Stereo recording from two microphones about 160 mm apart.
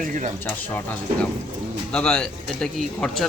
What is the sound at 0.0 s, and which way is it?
Speech, 55° right (ahead or behind).